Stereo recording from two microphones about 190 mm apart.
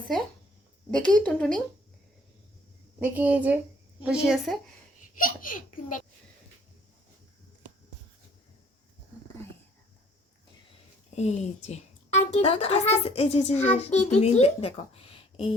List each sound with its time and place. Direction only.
0.9 s speech: 5° left (ahead or behind)
3.0 s a woman's voice: 5° right (ahead or behind)
5.1 s a child's voice: 45° left (ahead or behind)
11.1 s a child's voice: 35° left (ahead or behind)
15.1 s a sound: 30° left (ahead or behind)